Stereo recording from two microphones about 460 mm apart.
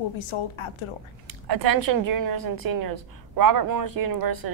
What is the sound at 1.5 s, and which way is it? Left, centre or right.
A woman's voice, right.